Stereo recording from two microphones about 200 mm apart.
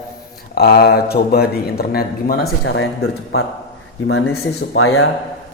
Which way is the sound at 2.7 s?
90° left.